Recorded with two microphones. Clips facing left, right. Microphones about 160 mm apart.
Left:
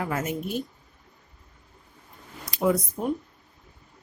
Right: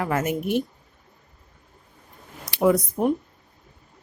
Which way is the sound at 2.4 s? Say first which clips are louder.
Right 4 dB; 70° right (ahead or behind).